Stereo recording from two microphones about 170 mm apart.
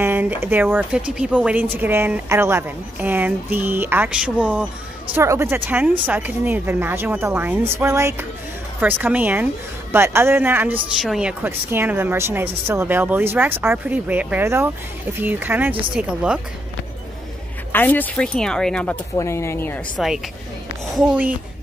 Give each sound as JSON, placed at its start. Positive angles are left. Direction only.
{"t": 0.0, "sound": "speech", "side_deg": -10}
{"t": 17.7, "sound": "speech", "side_deg": 10}
{"t": 19.1, "sound": "speech", "side_deg": 15}
{"t": 20.9, "sound": "speech", "side_deg": -10}